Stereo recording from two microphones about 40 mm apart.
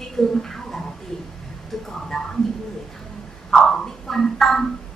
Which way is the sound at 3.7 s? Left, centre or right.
Centre.